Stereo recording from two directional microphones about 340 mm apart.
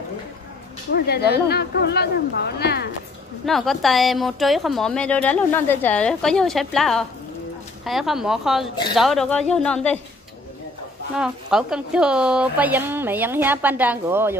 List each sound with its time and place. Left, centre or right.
0.9 s speech: left
3.4 s a woman's voice: centre
11.1 s a woman's voice: centre